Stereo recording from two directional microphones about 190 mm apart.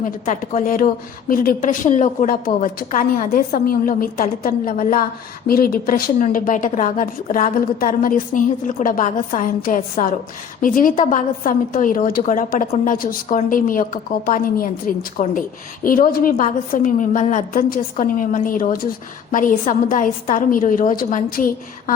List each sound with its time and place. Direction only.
0.0 s a woman's voice: 45° left (ahead or behind)